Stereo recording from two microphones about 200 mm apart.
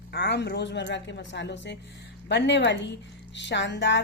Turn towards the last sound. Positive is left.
turn(degrees=60)  # may be behind; listen again after turning